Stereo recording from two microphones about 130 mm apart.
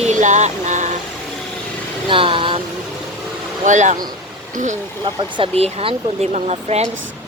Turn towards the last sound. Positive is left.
turn(degrees=-55)  # may be behind; listen again after turning